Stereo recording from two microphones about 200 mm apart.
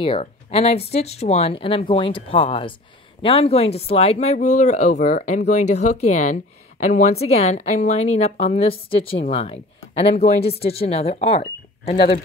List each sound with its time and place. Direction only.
0.0 s speech: 30° left (ahead or behind)